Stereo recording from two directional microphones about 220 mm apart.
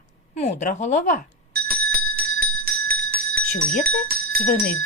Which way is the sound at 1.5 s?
45° right (ahead or behind).